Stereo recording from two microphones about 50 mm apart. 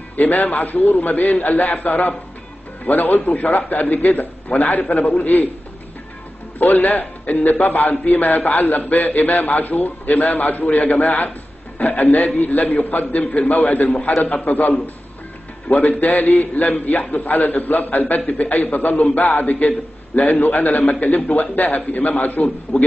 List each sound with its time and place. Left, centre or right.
0.1 s a man's voice: left
6.6 s a man's voice: left
15.7 s a man's voice: left